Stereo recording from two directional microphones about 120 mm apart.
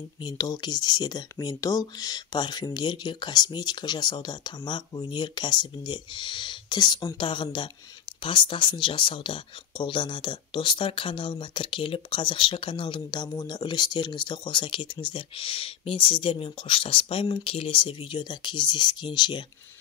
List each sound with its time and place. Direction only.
0.2 s speech: 35° left (ahead or behind)
7.2 s speech: 45° left (ahead or behind)